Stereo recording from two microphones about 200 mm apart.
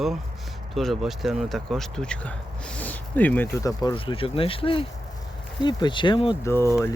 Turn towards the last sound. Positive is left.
turn(degrees=15)  # may be behind; listen again after turning